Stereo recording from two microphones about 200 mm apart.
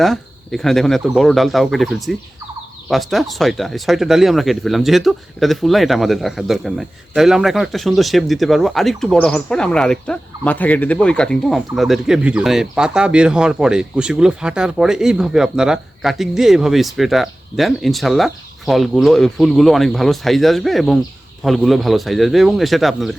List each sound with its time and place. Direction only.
0.0 s speech: centre (ahead or behind)